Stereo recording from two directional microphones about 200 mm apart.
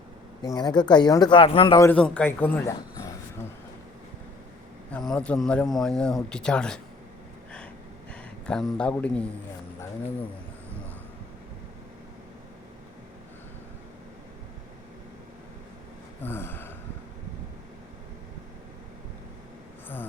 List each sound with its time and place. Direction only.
0.4 s speech: 20° left (ahead or behind)
1.9 s a man's voice: 5° left (ahead or behind)
4.9 s speech: 5° left (ahead or behind)
8.4 s speech: 5° left (ahead or behind)
16.2 s a sound: 10° left (ahead or behind)